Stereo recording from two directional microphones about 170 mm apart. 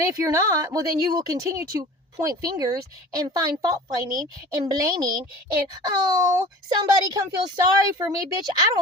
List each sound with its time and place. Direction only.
0.0 s a woman's voice: 15° right (ahead or behind)